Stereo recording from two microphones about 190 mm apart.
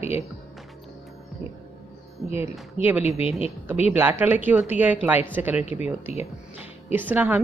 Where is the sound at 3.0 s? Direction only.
35° left (ahead or behind).